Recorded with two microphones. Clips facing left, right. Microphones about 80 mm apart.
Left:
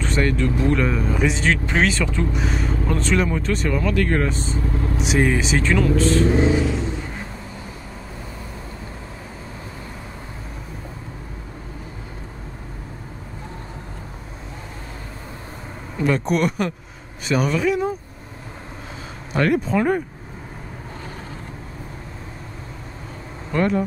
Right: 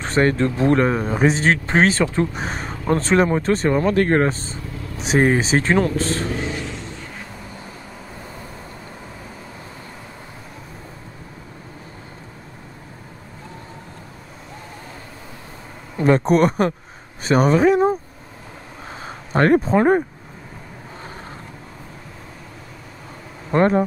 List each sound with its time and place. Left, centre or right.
0.0 s speech: right
4.6 s vehicle: left
4.9 s speech: right
6.2 s vehicle: left
6.5 s vehicle: centre
16.0 s speech: right
19.3 s speech: right
23.5 s speech: right